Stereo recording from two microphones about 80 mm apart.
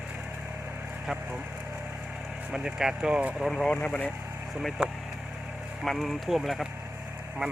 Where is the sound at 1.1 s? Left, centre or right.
Centre.